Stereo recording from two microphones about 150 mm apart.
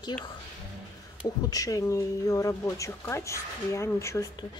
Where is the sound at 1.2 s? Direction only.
25° left (ahead or behind).